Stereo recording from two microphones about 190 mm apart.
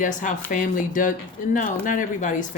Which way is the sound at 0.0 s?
45° left (ahead or behind).